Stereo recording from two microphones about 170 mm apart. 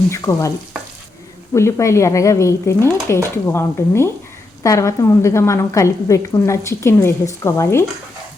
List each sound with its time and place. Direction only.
0.1 s speech: 15° left (ahead or behind)
1.5 s speech: 15° left (ahead or behind)